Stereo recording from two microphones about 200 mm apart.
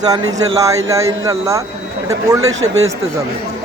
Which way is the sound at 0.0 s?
20° right (ahead or behind).